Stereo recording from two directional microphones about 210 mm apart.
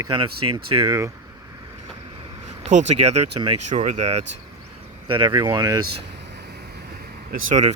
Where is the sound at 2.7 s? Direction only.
35° right (ahead or behind).